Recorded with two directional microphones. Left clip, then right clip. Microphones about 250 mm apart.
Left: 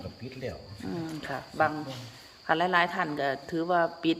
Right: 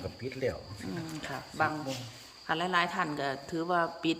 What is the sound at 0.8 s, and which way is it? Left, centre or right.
Speech, centre.